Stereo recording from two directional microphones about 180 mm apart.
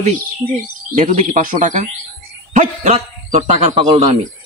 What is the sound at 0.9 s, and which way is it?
A man's voice, 45° right (ahead or behind).